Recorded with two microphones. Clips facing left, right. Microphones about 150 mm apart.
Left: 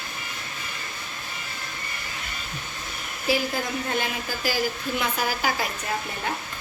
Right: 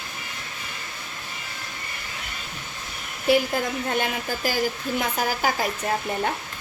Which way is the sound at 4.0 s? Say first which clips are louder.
Right 2 dB; 50° right (ahead or behind).